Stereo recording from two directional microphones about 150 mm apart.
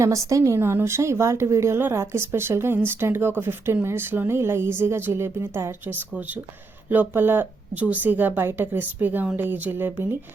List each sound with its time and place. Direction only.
0.0 s a woman's voice: 20° right (ahead or behind)